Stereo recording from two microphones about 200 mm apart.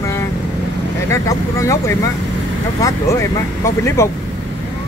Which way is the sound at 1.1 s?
15° left (ahead or behind).